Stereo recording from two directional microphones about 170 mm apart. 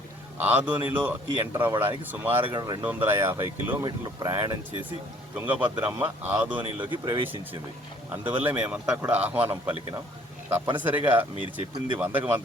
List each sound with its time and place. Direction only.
0.3 s speech: 10° right (ahead or behind)
2.4 s speech: 25° right (ahead or behind)
2.8 s speech: 10° right (ahead or behind)
5.3 s speech: 10° right (ahead or behind)
6.9 s speech: 30° right (ahead or behind)
8.4 s speech: 10° right (ahead or behind)